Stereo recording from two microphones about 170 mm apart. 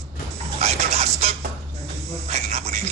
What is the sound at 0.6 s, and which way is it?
Dog, 40° right (ahead or behind).